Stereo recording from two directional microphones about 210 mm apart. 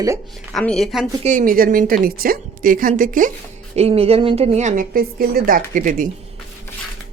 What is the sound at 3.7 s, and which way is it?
A woman's voice, 30° right (ahead or behind).